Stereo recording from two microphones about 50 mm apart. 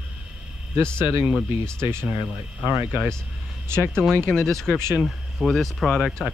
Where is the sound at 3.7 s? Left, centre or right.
Right.